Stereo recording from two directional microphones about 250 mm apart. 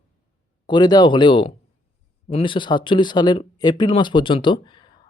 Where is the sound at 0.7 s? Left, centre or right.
Centre.